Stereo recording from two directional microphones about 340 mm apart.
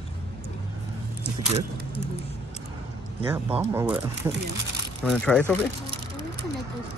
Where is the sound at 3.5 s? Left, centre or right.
Centre.